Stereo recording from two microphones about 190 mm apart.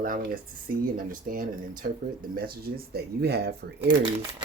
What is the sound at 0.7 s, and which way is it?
Speech, 45° right (ahead or behind).